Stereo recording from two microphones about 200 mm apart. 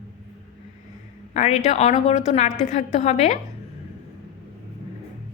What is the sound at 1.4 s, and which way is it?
A woman's voice, 35° left (ahead or behind).